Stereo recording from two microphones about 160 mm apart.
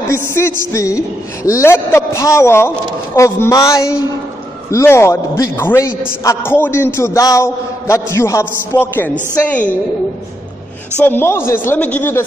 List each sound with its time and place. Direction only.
0.1 s a man's voice: 15° left (ahead or behind)
11.0 s a man's voice: 15° left (ahead or behind)